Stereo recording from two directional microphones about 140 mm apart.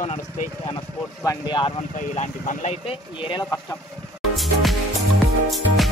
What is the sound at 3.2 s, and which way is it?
Speech, 35° left (ahead or behind).